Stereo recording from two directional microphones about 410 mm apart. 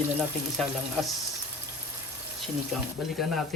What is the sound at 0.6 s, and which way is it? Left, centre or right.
Speech, centre.